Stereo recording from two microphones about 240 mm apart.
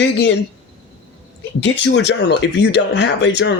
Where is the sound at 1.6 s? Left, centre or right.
Left.